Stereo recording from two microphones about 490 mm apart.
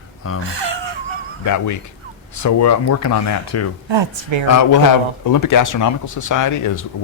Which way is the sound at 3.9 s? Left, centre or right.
Right.